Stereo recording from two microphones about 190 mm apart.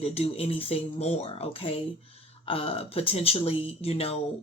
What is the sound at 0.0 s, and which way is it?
Speech, 30° left (ahead or behind).